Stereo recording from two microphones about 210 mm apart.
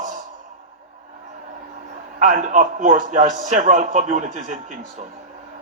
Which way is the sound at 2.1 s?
40° right (ahead or behind).